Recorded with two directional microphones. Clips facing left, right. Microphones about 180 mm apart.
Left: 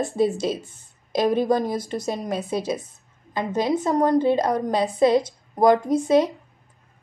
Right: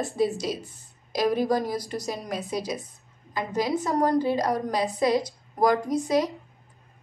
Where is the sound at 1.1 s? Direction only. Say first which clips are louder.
Left 3 dB; 25° left (ahead or behind).